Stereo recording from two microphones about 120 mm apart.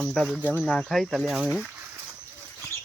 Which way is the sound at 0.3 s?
15° right (ahead or behind).